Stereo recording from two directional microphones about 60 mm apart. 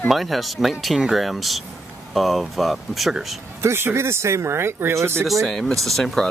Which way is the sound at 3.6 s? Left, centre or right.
Right.